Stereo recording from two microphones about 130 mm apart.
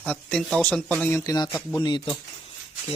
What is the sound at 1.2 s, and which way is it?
Speech, 25° left (ahead or behind).